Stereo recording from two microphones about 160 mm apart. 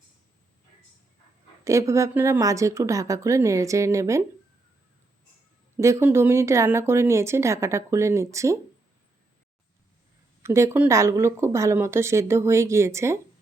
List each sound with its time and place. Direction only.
1.6 s speech: 20° right (ahead or behind)
5.7 s speech: 15° right (ahead or behind)
10.4 s speech: 15° right (ahead or behind)